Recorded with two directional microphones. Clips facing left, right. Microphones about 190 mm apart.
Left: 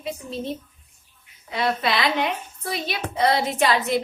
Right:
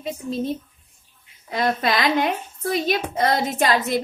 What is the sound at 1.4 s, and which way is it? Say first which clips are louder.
A woman's voice: right 2 dB; 45° right (ahead or behind).